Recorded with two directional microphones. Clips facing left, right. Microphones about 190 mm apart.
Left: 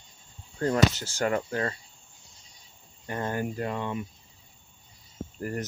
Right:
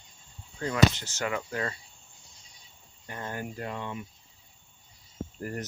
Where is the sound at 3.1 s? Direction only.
55° left (ahead or behind).